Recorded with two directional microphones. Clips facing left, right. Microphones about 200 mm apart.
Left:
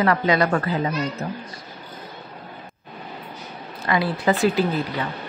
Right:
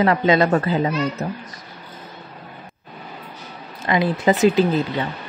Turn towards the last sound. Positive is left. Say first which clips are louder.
# right 4 dB
turn(degrees=-25)  # may be behind; listen again after turning